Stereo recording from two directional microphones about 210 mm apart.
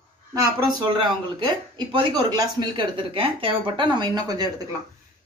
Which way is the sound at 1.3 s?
20° right (ahead or behind).